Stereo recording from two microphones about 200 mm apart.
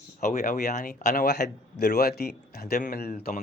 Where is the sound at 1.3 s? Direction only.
55° left (ahead or behind).